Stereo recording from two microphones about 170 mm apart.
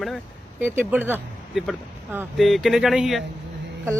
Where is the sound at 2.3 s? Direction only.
Centre (ahead or behind).